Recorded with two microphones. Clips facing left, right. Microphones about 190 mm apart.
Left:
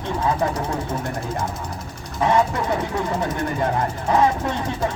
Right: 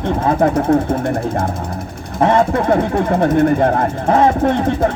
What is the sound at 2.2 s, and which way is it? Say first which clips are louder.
Speech: right 6 dB; 55° right (ahead or behind).